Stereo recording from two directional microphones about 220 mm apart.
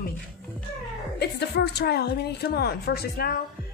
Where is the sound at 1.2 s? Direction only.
45° left (ahead or behind).